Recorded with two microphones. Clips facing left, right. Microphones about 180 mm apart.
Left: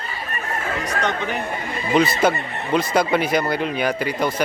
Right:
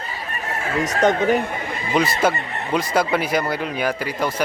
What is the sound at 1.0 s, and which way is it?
Speech, 45° right (ahead or behind).